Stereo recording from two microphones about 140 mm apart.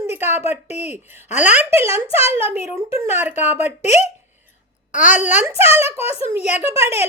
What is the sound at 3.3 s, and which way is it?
Speech, 55° left (ahead or behind).